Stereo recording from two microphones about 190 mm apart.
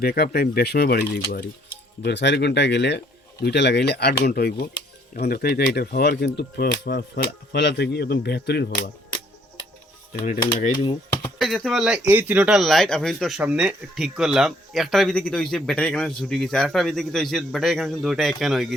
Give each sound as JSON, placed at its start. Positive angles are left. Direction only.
{"t": 0.0, "sound": "speech", "side_deg": 55}
{"t": 10.2, "sound": "speech", "side_deg": 45}
{"t": 10.7, "sound": "speech", "side_deg": 25}
{"t": 11.3, "sound": "speech", "side_deg": 0}